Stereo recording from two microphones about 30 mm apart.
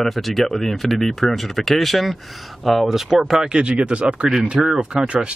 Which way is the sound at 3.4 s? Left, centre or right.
Right.